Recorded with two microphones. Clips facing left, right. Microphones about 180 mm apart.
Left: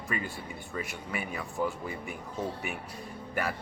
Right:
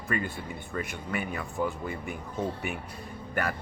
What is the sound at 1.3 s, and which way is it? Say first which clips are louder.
Speech: right 1 dB; centre (ahead or behind).